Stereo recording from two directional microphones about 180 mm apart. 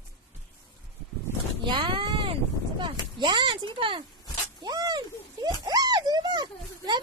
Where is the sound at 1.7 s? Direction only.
25° right (ahead or behind).